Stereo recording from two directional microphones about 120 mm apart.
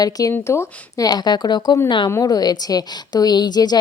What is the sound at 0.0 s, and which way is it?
A woman's voice, 30° left (ahead or behind).